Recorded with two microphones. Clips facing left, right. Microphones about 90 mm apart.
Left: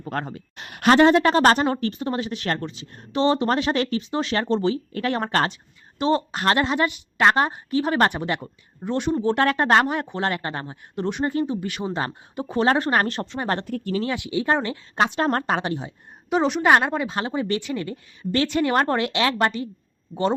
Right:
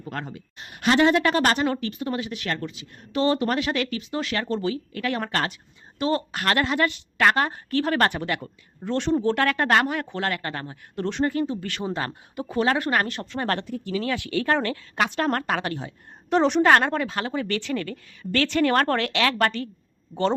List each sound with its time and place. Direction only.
0.0 s speech: 40° left (ahead or behind)
0.5 s a sound: 75° left (ahead or behind)
0.9 s a woman's voice: 35° left (ahead or behind); by 9.1 s 15° left (ahead or behind)
9.2 s a woman's voice: 25° left (ahead or behind)
13.3 s a woman's voice: 20° left (ahead or behind)
13.7 s speech: 50° left (ahead or behind)
14.0 s a woman's voice: 20° left (ahead or behind)
16.3 s a woman's voice: centre (ahead or behind)
16.6 s a woman's voice: 15° left (ahead or behind)